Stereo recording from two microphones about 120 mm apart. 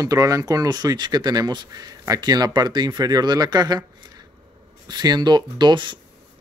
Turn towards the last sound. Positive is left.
turn(degrees=-40)  # may be behind; listen again after turning